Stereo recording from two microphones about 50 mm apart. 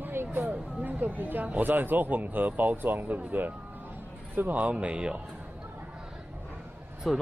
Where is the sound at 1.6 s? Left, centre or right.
Right.